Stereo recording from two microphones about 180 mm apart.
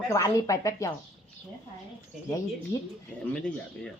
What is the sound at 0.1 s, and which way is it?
Speech, 20° left (ahead or behind).